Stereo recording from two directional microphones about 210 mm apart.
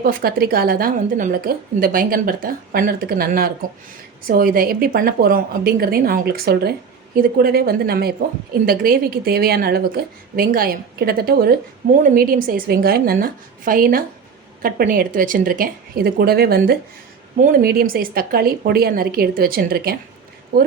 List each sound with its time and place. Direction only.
0.0 s a woman's voice: 45° right (ahead or behind)